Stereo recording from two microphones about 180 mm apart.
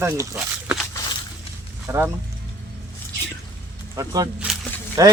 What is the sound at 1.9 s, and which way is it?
Speech, 15° right (ahead or behind).